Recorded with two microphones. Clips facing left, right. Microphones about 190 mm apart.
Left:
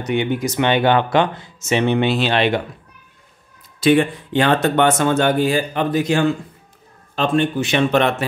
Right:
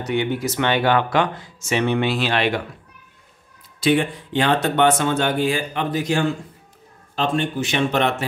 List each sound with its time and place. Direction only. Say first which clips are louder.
0.0 s speech: left 2 dB; 20° left (ahead or behind)
3.8 s speech: left 4 dB; 55° left (ahead or behind)
7.2 s speech: left 4 dB; 60° left (ahead or behind)